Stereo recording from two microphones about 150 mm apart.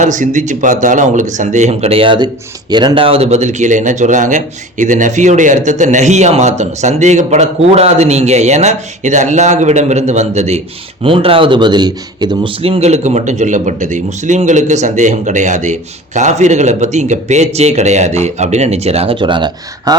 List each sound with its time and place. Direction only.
0.0 s speech: 55° right (ahead or behind)
11.0 s speech: 35° right (ahead or behind)